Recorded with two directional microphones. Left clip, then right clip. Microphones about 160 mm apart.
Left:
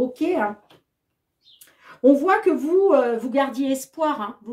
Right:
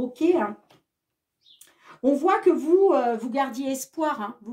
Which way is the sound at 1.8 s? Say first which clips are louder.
Left 5 dB; 35° right (ahead or behind).